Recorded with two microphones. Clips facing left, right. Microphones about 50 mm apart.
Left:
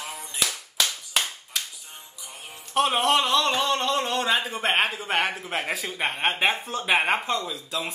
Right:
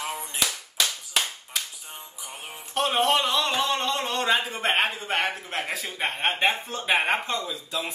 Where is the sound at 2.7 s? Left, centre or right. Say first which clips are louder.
Left 1 dB; centre.